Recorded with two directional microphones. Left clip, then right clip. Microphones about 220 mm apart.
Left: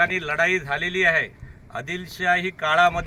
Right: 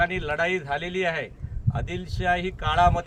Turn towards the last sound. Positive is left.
turn(degrees=-5)  # may be behind; listen again after turning